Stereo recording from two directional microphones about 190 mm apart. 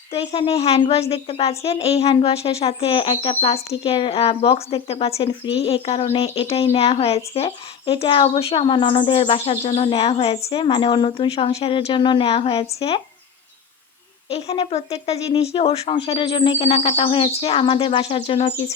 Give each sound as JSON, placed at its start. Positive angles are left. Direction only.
{"t": 0.1, "sound": "a woman's voice", "side_deg": 30}
{"t": 14.3, "sound": "a woman's voice", "side_deg": 30}